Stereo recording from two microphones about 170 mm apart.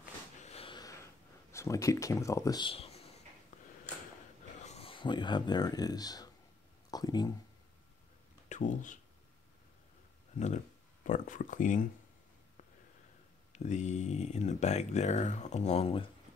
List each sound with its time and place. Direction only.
0.4 s a sound: 35° left (ahead or behind)
0.7 s wheeze: 20° left (ahead or behind)
1.5 s speech: 15° left (ahead or behind); by 3.0 s 35° left (ahead or behind)
4.6 s speech: 40° left (ahead or behind); by 7.3 s 25° left (ahead or behind)
8.5 s speech: 45° left (ahead or behind)
11.1 s speech: 50° left (ahead or behind)
13.5 s speech: 45° left (ahead or behind)